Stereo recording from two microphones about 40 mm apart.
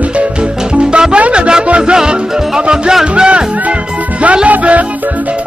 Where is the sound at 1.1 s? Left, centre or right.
Right.